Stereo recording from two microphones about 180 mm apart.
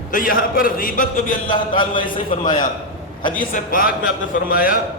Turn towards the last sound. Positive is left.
turn(degrees=50)  # may be behind; listen again after turning